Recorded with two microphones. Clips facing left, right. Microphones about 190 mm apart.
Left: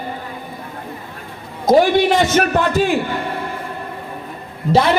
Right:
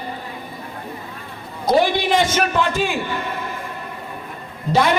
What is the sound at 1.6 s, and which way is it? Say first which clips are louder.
A man's voice: left 5 dB; 45° left (ahead or behind).